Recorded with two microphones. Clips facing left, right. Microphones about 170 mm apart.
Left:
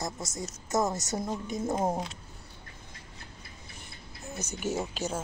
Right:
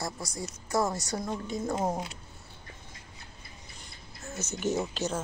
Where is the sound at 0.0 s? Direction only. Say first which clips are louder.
Even; 20° left (ahead or behind).